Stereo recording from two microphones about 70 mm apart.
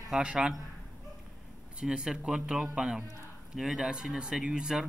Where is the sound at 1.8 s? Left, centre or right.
Centre.